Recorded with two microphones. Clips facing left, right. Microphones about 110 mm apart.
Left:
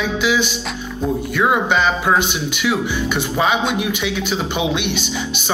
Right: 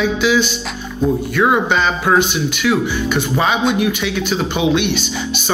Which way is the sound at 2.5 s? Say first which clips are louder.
Right 3 dB; 15° left (ahead or behind).